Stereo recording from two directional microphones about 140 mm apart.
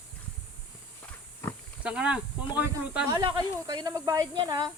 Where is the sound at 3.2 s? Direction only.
30° right (ahead or behind).